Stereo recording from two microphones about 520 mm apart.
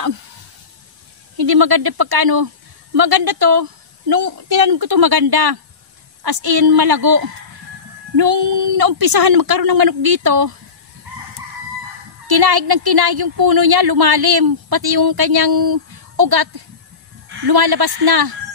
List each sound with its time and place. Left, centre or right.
1.3 s a woman's voice: right
12.3 s a woman's voice: right